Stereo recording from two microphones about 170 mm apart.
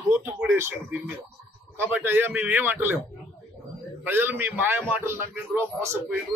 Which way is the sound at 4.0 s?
10° right (ahead or behind).